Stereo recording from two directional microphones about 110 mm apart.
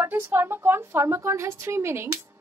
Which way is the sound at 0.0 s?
20° right (ahead or behind).